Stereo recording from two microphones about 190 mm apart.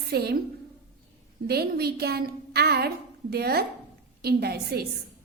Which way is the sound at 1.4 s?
55° right (ahead or behind).